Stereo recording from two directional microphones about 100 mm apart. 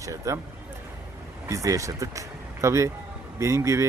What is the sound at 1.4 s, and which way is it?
Speech, 30° right (ahead or behind).